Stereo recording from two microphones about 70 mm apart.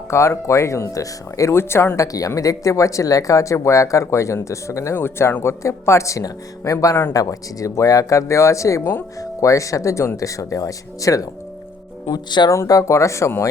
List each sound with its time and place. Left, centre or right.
0.1 s speech: left
2.1 s speech: left
4.9 s speech: left
8.8 s speech: left
9.2 s speech: left
12.1 s speech: left
12.5 s speech: left